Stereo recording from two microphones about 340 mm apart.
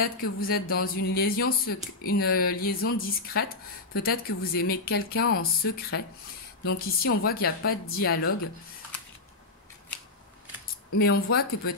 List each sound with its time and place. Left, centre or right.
0.0 s speech: left
11.0 s speech: left